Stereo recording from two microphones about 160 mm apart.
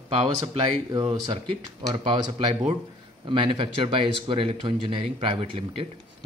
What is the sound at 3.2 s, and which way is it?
Speech, 30° right (ahead or behind).